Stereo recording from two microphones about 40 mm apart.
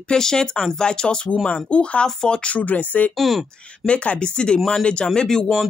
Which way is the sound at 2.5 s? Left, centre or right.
Left.